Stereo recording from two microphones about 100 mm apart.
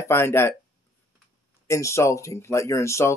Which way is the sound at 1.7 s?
30° left (ahead or behind).